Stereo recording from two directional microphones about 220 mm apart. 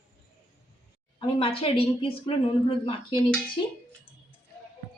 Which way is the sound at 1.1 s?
25° left (ahead or behind).